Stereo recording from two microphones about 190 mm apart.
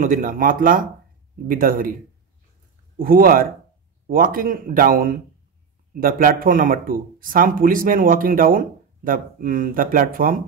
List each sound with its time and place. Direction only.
0.0 s speech: 45° right (ahead or behind)
3.0 s speech: 50° right (ahead or behind)